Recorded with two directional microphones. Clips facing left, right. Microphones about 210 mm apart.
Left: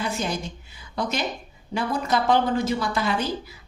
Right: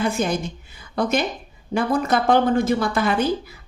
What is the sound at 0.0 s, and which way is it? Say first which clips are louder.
A woman's voice: right 6 dB; 50° right (ahead or behind).